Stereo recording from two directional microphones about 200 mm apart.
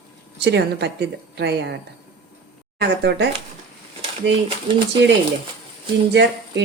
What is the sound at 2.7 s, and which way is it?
Speech, 55° right (ahead or behind).